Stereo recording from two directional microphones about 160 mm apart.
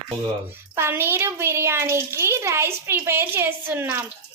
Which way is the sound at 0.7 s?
15° right (ahead or behind).